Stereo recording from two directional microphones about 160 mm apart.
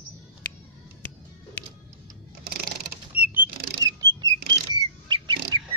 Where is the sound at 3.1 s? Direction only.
10° right (ahead or behind).